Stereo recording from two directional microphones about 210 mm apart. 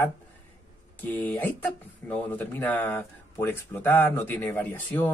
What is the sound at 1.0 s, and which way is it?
Speech, 10° left (ahead or behind).